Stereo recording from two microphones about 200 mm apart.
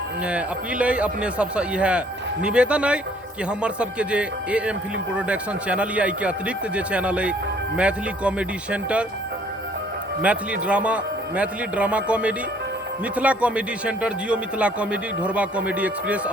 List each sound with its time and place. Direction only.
0.3 s a man's voice: 5° right (ahead or behind)
10.2 s a man's voice: 5° right (ahead or behind)